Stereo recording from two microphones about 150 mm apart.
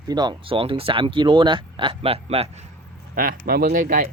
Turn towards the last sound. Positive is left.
turn(degrees=-65)  # may be behind; listen again after turning